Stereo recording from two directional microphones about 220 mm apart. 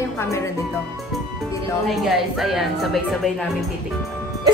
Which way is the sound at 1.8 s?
Centre (ahead or behind).